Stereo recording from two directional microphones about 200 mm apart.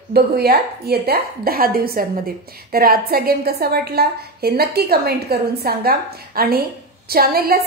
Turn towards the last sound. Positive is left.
turn(degrees=-50)  # may be behind; listen again after turning